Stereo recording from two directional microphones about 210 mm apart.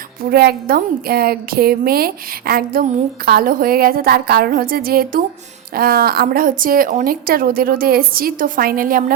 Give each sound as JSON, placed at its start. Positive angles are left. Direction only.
{"t": 0.2, "sound": "a woman's voice", "side_deg": -50}